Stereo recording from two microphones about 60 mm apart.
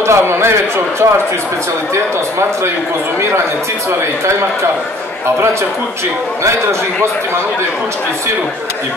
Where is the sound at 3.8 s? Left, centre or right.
Right.